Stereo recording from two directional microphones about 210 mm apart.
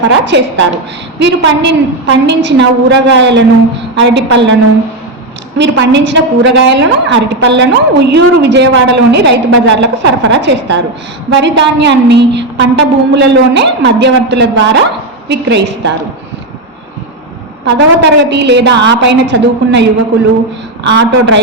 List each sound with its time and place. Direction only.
0.1 s a woman's voice: 55° right (ahead or behind)
5.5 s a woman's voice: 55° right (ahead or behind)
17.7 s a woman's voice: 55° right (ahead or behind)
20.8 s a woman's voice: 55° right (ahead or behind)